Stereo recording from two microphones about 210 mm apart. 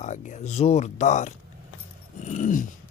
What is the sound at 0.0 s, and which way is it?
Speech, 35° left (ahead or behind).